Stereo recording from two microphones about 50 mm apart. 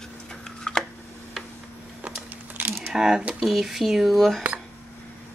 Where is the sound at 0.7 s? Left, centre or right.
Centre.